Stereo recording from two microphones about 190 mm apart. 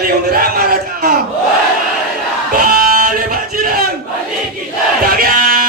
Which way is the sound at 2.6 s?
50° right (ahead or behind).